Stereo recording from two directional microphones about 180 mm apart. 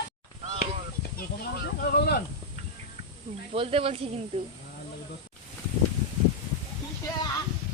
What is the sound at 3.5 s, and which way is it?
Speech, 30° right (ahead or behind).